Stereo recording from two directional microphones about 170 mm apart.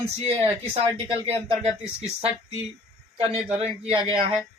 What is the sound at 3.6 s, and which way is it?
Speech, 35° right (ahead or behind).